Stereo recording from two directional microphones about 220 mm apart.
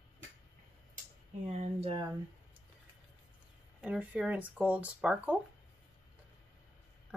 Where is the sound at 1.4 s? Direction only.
30° right (ahead or behind).